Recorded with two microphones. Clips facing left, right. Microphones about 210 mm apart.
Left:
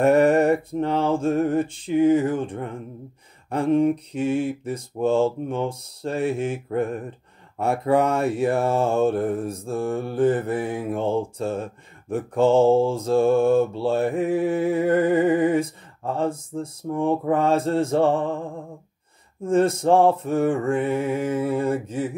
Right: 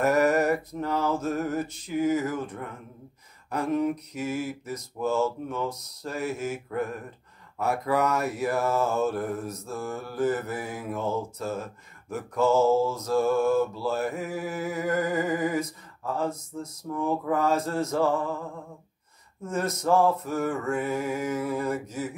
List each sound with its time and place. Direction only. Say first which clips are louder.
0.0 s mantra: left 6 dB; 30° left (ahead or behind)